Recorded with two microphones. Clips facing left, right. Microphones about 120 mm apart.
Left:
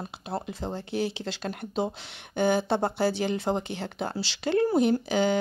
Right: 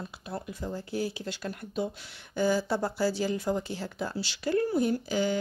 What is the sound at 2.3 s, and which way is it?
Speech, 65° left (ahead or behind).